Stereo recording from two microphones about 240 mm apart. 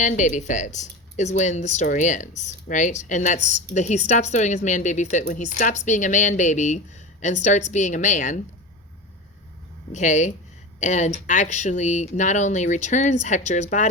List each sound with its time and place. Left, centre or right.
0.0 s speech: left
9.9 s speech: left